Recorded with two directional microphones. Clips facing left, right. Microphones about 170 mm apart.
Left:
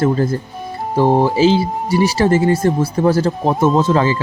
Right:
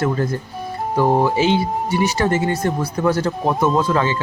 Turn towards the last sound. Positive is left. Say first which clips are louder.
# left 4 dB
turn(degrees=30)  # may be behind; listen again after turning